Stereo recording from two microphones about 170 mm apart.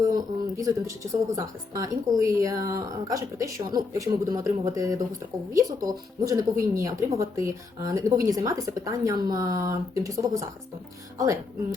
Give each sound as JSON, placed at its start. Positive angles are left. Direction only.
{"t": 0.0, "sound": "speech", "side_deg": -20}